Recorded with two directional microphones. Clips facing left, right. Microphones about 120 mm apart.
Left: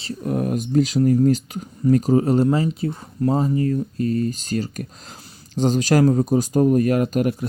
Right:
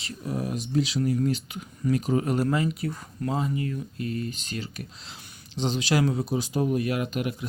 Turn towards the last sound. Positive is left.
turn(degrees=40)  # may be behind; listen again after turning